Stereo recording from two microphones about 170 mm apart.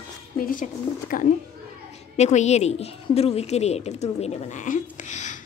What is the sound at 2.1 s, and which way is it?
A woman's voice, 40° left (ahead or behind).